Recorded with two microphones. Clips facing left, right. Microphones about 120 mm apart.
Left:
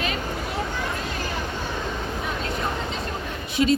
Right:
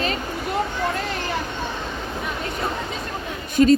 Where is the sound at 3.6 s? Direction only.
45° right (ahead or behind).